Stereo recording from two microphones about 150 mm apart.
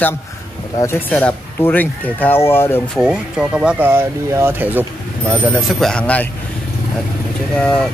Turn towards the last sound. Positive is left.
turn(degrees=5)  # may be behind; listen again after turning